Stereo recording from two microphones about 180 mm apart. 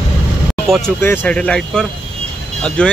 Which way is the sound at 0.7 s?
Centre (ahead or behind).